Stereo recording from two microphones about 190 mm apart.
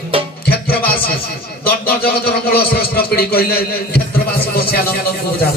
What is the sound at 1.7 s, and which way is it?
A man's voice, 55° left (ahead or behind).